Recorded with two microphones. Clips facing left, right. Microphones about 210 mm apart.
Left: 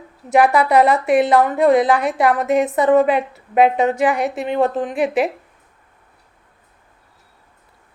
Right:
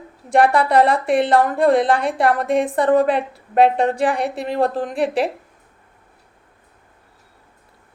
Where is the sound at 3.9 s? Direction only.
30° right (ahead or behind).